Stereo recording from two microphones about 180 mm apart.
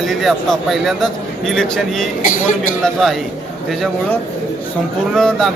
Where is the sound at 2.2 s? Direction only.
45° left (ahead or behind).